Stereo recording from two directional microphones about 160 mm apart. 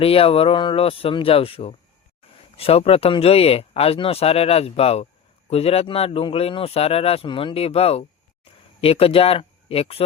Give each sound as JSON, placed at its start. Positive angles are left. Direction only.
{"t": 0.0, "sound": "speech", "side_deg": 35}